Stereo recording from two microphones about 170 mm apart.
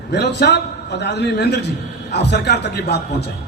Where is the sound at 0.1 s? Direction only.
85° left.